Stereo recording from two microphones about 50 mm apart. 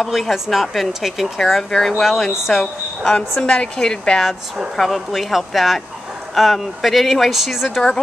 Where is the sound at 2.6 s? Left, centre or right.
Centre.